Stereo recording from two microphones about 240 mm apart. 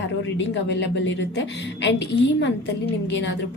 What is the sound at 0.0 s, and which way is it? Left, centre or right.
Speech, left.